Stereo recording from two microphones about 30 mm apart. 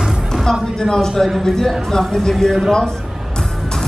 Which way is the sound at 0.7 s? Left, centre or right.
Centre.